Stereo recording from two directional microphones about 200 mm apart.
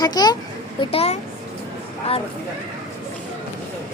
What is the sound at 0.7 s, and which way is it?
Speech, 30° left (ahead or behind).